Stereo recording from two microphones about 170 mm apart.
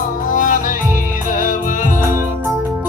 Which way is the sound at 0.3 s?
50° left (ahead or behind).